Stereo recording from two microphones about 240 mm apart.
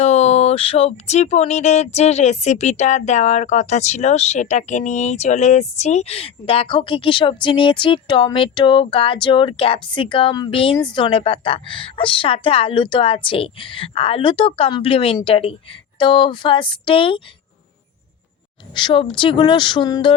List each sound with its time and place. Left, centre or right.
0.0 s speech: left
18.7 s speech: centre